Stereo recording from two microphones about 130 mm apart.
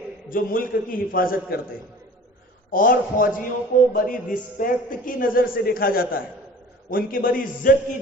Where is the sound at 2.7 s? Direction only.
90° left.